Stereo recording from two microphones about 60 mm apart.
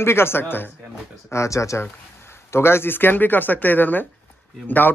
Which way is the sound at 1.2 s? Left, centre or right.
Left.